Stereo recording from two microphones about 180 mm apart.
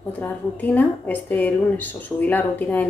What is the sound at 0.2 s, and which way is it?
A woman's voice, 10° left (ahead or behind).